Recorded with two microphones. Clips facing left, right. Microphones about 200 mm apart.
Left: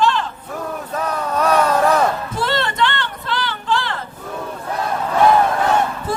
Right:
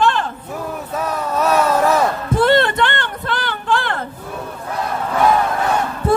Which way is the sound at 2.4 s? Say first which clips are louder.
Right 7 dB; 55° right (ahead or behind).